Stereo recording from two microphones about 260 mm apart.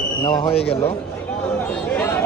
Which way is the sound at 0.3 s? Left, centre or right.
Centre.